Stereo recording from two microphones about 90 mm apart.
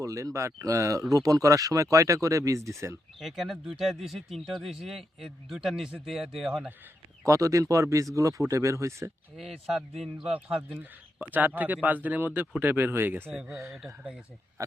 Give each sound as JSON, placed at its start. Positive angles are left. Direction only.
{"t": 0.0, "sound": "speech", "side_deg": -35}
{"t": 3.2, "sound": "speech", "side_deg": 0}
{"t": 7.3, "sound": "speech", "side_deg": -35}
{"t": 9.3, "sound": "speech", "side_deg": 0}
{"t": 10.8, "sound": "speech", "side_deg": -20}
{"t": 13.7, "sound": "speech", "side_deg": 0}